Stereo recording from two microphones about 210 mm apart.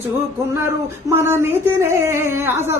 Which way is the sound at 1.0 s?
10° right (ahead or behind).